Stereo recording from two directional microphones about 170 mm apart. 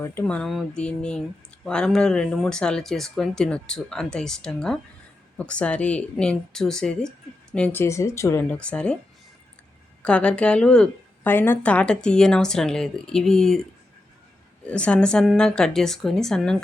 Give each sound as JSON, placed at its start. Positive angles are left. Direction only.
{"t": 0.0, "sound": "a woman's voice", "side_deg": 15}
{"t": 8.4, "sound": "speech", "side_deg": 5}
{"t": 10.0, "sound": "a woman's voice", "side_deg": 5}
{"t": 14.7, "sound": "a woman's voice", "side_deg": 5}